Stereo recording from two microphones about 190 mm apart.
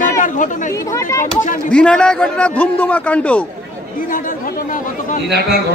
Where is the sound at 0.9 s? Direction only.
15° left (ahead or behind).